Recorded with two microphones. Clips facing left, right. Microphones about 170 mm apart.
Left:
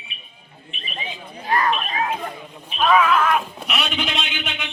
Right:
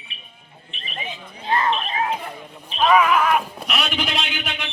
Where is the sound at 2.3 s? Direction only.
Centre (ahead or behind).